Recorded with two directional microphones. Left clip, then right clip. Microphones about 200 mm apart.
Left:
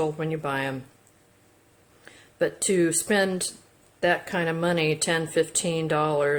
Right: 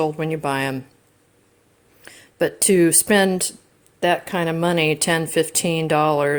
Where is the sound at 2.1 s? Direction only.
45° right (ahead or behind).